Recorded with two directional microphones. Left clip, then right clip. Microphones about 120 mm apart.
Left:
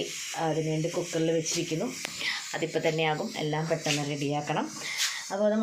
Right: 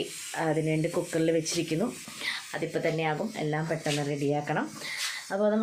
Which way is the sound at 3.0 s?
30° right (ahead or behind).